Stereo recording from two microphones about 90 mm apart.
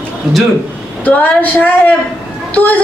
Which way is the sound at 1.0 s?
20° left (ahead or behind).